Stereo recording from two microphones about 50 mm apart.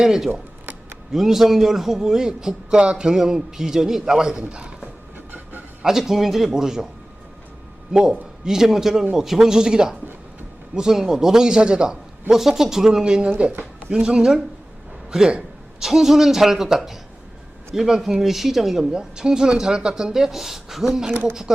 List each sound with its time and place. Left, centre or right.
0.0 s a man's voice: centre
0.3 s a sound: right
1.1 s a man's voice: centre; by 4.9 s right
5.1 s train: right
5.8 s a man's voice: centre
7.9 s a man's voice: centre